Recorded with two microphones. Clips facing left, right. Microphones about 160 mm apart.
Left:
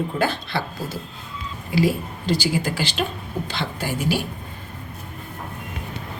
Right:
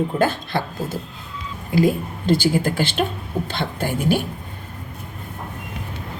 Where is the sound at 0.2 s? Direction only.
45° right (ahead or behind).